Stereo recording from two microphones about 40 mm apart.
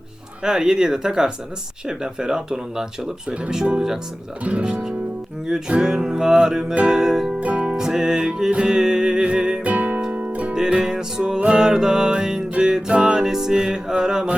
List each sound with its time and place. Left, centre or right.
0.4 s speech: centre
4.4 s music: right
5.5 s speech: centre
7.3 s music: right
7.8 s music: centre
9.6 s music: right
10.5 s music: centre